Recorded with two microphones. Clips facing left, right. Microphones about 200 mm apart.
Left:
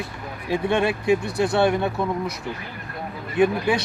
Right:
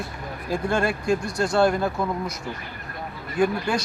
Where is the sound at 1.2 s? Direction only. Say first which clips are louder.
Left 2 dB; 60° left (ahead or behind).